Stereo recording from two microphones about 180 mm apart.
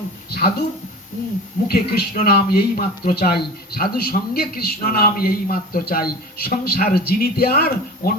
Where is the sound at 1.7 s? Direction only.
60° left (ahead or behind).